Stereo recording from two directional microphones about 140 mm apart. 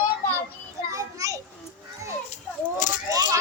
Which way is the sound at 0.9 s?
25° right (ahead or behind).